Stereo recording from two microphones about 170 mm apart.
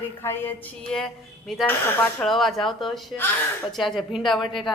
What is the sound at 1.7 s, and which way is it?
Speech, 10° left (ahead or behind).